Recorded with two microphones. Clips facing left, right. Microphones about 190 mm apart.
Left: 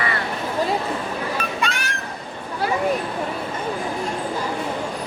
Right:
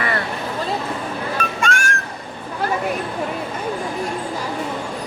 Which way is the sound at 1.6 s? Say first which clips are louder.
Right 4 dB; 45° right (ahead or behind).